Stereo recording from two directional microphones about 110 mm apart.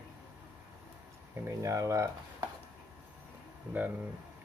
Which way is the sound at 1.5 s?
25° right (ahead or behind).